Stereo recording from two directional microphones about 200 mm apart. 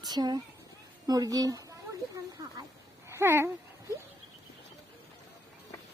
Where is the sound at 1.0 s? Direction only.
20° right (ahead or behind).